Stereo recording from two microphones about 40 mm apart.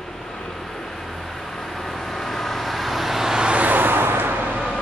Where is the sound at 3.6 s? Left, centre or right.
Right.